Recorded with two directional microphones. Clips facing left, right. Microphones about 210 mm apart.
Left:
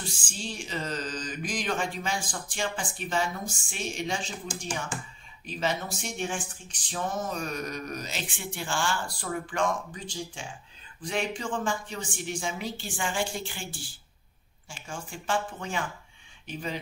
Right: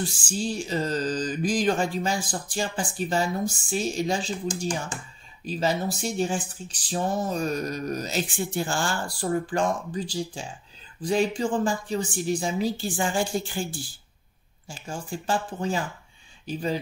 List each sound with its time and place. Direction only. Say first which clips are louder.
0.3 s speech: right 8 dB; 40° right (ahead or behind)
5.4 s speech: right 5 dB; 35° right (ahead or behind)